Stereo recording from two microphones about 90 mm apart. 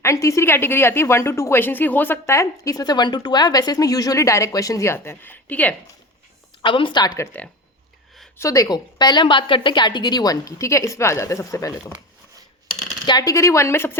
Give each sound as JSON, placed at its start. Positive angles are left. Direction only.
{"t": 0.0, "sound": "a woman's voice", "side_deg": 35}
{"t": 6.6, "sound": "a woman's voice", "side_deg": 65}
{"t": 7.3, "sound": "speech", "side_deg": 20}
{"t": 8.4, "sound": "a woman's voice", "side_deg": 35}
{"t": 9.2, "sound": "a woman's voice", "side_deg": 70}
{"t": 13.1, "sound": "a woman's voice", "side_deg": 50}
{"t": 13.3, "sound": "a woman's voice", "side_deg": 35}